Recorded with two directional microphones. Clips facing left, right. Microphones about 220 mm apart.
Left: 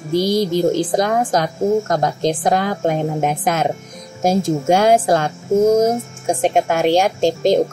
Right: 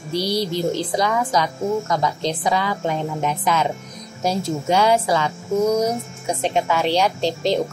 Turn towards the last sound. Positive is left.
turn(degrees=45)  # may be behind; listen again after turning